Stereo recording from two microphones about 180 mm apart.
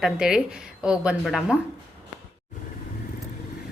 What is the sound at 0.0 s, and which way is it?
Speech, 5° right (ahead or behind).